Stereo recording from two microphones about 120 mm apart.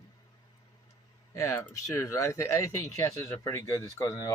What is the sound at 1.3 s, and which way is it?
Speech, 25° left (ahead or behind).